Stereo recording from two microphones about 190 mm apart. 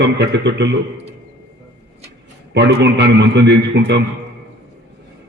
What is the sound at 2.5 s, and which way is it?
A man's voice, 65° right (ahead or behind).